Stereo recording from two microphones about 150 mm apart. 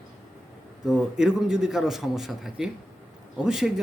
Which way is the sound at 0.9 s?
5° right (ahead or behind).